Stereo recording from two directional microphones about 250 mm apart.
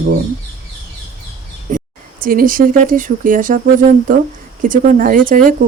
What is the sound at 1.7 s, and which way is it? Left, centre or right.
Speech, right.